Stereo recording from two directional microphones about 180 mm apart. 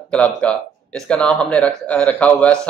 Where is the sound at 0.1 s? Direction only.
5° left (ahead or behind).